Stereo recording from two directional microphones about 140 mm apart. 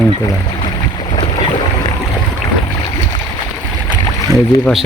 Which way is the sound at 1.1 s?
35° left (ahead or behind).